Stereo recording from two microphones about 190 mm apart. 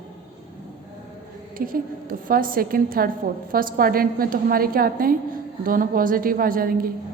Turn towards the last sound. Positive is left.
turn(degrees=-50)  # may be behind; listen again after turning